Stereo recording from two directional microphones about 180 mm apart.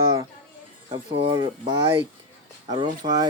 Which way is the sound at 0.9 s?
30° right (ahead or behind).